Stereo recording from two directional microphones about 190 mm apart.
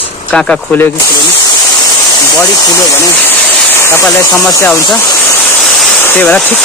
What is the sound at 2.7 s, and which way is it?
Speech, 15° left (ahead or behind).